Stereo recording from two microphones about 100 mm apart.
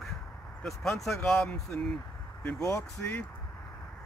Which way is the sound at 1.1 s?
25° left (ahead or behind).